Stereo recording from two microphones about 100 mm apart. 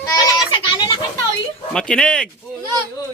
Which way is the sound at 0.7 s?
55° left (ahead or behind).